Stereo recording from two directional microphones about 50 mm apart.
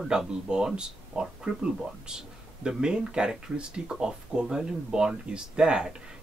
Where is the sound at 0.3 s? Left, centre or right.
Centre.